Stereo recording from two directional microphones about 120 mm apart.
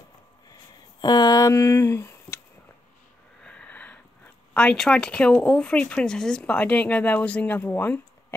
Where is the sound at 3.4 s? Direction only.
10° left (ahead or behind).